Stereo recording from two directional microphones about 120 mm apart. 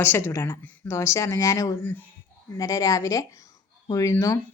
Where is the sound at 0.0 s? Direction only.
20° left (ahead or behind).